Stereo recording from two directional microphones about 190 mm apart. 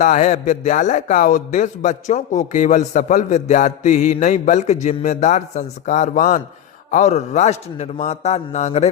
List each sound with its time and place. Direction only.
0.0 s speech: 40° left (ahead or behind)